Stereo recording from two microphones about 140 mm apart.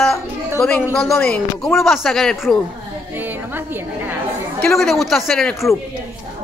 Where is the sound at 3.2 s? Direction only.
15° right (ahead or behind).